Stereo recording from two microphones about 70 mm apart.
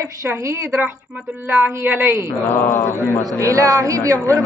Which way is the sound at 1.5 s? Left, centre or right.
Right.